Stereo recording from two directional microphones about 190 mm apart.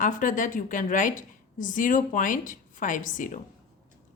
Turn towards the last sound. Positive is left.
turn(degrees=45)  # may be behind; listen again after turning